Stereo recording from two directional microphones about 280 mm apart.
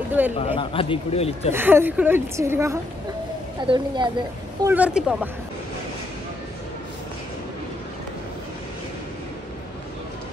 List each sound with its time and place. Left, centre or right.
0.4 s a man's voice: centre
1.5 s a woman's voice: centre
4.6 s speech: centre